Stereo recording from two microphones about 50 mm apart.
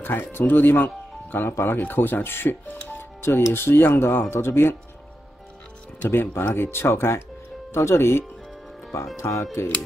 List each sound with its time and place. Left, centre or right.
0.0 s speech: left
3.0 s music: left
3.5 s speech: left
6.0 s speech: left
6.8 s speech: left
9.2 s speech: left